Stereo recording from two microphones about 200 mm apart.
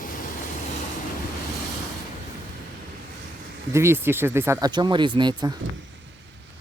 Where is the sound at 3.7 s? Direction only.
15° right (ahead or behind).